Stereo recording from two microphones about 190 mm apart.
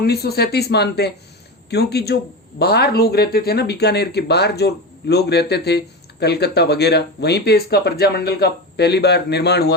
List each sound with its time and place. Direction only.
0.0 s speech: 55° left (ahead or behind)